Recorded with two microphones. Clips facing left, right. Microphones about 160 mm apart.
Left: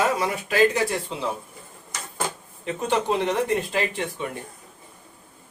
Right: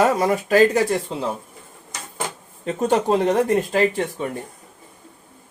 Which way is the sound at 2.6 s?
40° right (ahead or behind).